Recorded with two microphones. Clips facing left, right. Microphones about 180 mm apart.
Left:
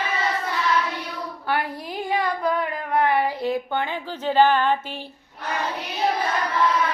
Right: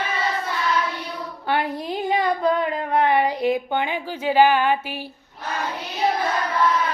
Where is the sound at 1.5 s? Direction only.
25° right (ahead or behind).